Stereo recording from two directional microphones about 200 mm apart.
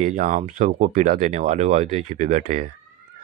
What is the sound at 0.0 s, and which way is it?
Speech, 40° right (ahead or behind).